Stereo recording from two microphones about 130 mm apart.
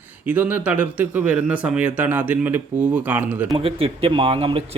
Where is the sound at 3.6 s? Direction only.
45° right (ahead or behind).